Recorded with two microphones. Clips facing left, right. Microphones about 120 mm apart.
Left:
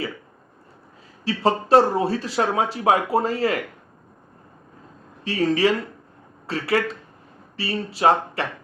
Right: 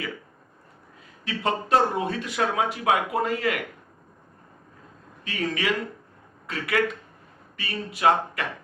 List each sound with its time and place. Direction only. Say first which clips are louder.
1.2 s speech: left 6 dB; 30° left (ahead or behind)
5.2 s speech: left 8 dB; 30° left (ahead or behind)